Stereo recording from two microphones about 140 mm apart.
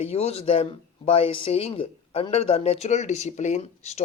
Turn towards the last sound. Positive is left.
turn(degrees=50)  # may be behind; listen again after turning